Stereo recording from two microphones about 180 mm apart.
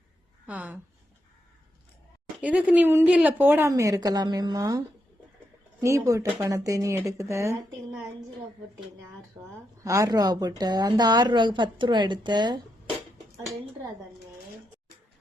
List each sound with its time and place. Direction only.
0.4 s a woman's voice: 10° right (ahead or behind)
2.4 s a woman's voice: 10° right (ahead or behind)
5.8 s a woman's voice: 15° right (ahead or behind)
9.4 s a woman's voice: 20° right (ahead or behind)